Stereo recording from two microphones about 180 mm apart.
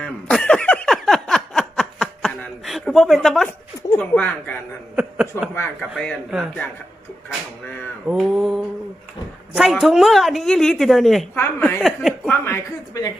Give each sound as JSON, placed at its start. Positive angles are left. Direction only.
{"t": 0.0, "sound": "a sound", "side_deg": 5}
{"t": 3.9, "sound": "speech", "side_deg": 5}
{"t": 4.9, "sound": "speech", "side_deg": -5}
{"t": 5.5, "sound": "speech", "side_deg": 10}
{"t": 5.9, "sound": "a woman's voice", "side_deg": 0}
{"t": 8.0, "sound": "mantra", "side_deg": -5}
{"t": 9.5, "sound": "a woman's voice", "side_deg": 0}
{"t": 11.3, "sound": "speech", "side_deg": 10}
{"t": 11.8, "sound": "speech", "side_deg": 0}
{"t": 12.3, "sound": "a woman's voice", "side_deg": 15}